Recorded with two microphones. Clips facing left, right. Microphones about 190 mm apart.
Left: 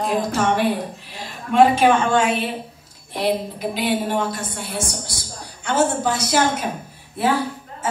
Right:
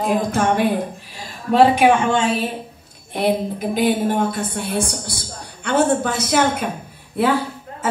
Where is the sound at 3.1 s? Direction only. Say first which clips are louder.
Right 2 dB; 50° right (ahead or behind).